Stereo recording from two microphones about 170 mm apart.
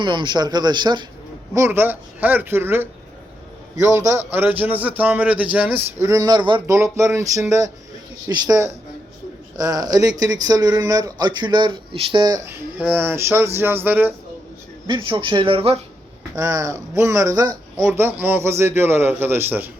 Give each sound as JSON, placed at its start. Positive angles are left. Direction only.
{"t": 0.0, "sound": "speech", "side_deg": -25}
{"t": 1.5, "sound": "speech", "side_deg": -15}
{"t": 12.8, "sound": "speech", "side_deg": -10}
{"t": 14.8, "sound": "speech", "side_deg": -30}
{"t": 16.3, "sound": "speech", "side_deg": -20}